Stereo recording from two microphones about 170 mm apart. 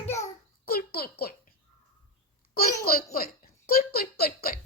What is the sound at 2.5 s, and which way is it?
A child's voice, 60° left (ahead or behind).